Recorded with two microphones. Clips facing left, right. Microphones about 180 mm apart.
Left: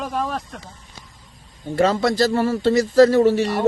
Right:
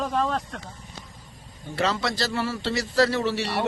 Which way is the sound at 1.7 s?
50° left (ahead or behind).